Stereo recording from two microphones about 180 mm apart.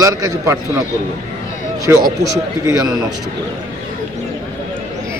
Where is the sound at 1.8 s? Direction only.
20° right (ahead or behind).